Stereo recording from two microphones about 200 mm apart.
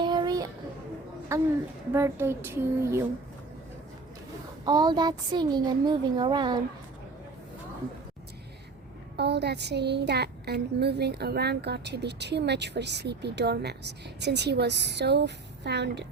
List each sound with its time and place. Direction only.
0.0 s child singing: 20° right (ahead or behind)
1.3 s speech: 15° right (ahead or behind)
4.6 s a woman's voice: 20° right (ahead or behind)
9.1 s a woman's voice: 55° right (ahead or behind)